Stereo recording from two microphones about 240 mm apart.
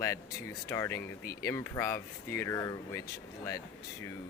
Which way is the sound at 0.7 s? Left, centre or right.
Centre.